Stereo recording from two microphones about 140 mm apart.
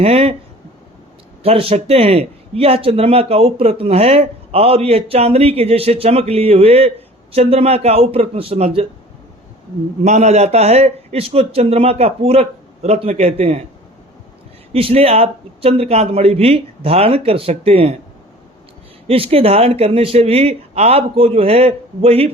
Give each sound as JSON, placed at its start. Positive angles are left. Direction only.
{"t": 0.0, "sound": "speech", "side_deg": -45}
{"t": 1.4, "sound": "speech", "side_deg": -45}
{"t": 10.0, "sound": "speech", "side_deg": -55}
{"t": 14.7, "sound": "speech", "side_deg": -45}
{"t": 19.0, "sound": "speech", "side_deg": -45}